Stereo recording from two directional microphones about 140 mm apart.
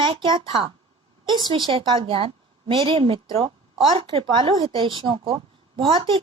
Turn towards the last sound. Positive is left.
turn(degrees=-35)  # may be behind; listen again after turning